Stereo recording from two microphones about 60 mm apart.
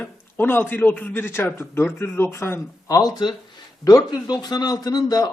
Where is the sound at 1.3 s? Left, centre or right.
Left.